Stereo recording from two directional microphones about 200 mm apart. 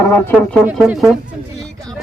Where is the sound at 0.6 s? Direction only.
Centre (ahead or behind).